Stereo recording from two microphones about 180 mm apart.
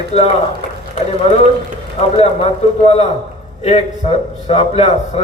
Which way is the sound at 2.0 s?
35° left (ahead or behind).